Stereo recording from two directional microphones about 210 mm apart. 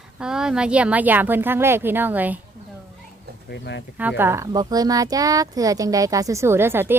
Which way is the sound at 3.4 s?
55° left (ahead or behind).